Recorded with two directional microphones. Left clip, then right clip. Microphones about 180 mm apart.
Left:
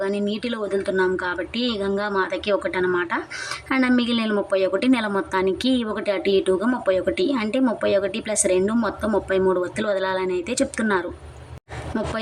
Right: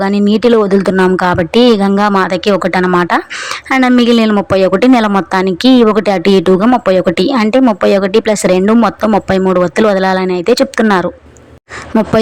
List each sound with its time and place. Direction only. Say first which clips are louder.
0.0 s speech: right 14 dB; 45° right (ahead or behind)